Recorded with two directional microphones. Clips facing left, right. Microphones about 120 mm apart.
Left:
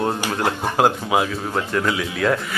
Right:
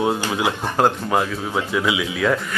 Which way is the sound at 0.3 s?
5° right (ahead or behind).